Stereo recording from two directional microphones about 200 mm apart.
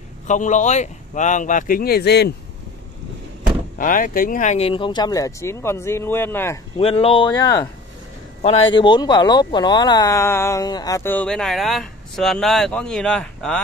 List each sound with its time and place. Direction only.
0.3 s speech: 40° left (ahead or behind); by 2.3 s 55° left (ahead or behind)
3.7 s speech: 40° left (ahead or behind); by 6.6 s 10° left (ahead or behind)
6.8 s speech: 30° left (ahead or behind)
8.4 s speech: 30° left (ahead or behind); by 13.6 s 5° left (ahead or behind)